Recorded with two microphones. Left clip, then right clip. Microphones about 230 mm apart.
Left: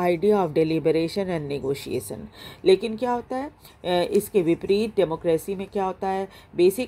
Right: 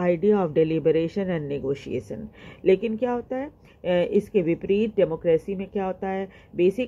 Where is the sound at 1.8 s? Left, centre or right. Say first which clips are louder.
Left 1 dB; left.